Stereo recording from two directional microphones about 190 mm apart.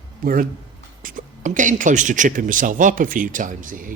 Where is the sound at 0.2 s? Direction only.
50° right (ahead or behind).